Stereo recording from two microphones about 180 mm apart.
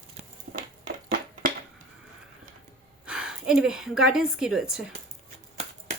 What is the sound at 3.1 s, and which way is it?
A woman's voice, 5° right (ahead or behind).